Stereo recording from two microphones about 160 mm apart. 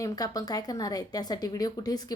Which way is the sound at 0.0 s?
25° left (ahead or behind).